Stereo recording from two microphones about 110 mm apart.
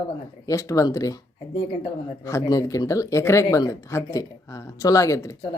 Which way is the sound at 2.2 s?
30° left (ahead or behind).